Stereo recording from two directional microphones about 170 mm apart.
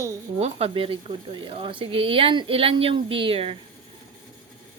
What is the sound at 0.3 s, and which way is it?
Speech, 35° right (ahead or behind).